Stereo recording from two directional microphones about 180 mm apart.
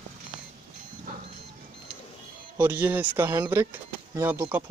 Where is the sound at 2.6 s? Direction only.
10° right (ahead or behind).